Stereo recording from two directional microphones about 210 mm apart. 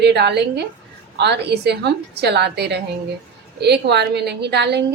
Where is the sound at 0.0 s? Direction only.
55° right (ahead or behind).